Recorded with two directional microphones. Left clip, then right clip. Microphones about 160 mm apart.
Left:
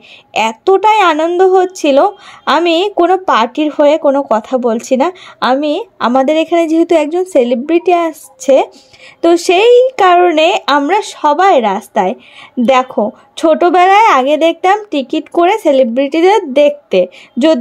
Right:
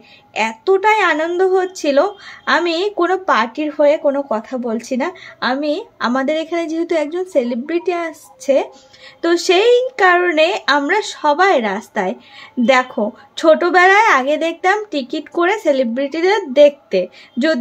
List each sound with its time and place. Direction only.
0.3 s speech: 40° left (ahead or behind)
9.2 s speech: 35° left (ahead or behind)